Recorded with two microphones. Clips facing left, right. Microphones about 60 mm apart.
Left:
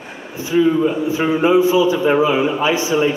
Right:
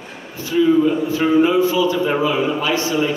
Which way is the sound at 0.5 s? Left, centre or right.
Centre.